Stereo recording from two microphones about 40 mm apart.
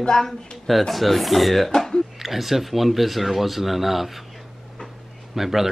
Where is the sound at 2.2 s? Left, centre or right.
Centre.